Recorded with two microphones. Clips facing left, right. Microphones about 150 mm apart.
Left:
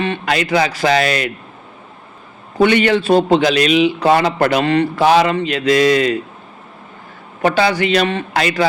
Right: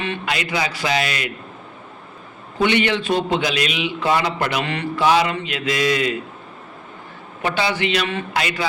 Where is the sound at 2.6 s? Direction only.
45° left (ahead or behind).